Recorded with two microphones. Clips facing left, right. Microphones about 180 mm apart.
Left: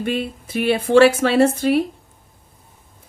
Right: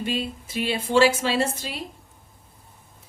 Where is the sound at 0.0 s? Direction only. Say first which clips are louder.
Left 5 dB; 60° left (ahead or behind).